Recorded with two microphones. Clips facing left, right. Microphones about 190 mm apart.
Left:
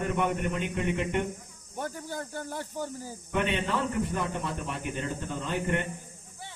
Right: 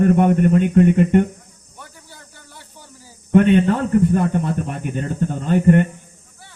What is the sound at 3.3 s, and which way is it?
A man's voice, 50° right (ahead or behind).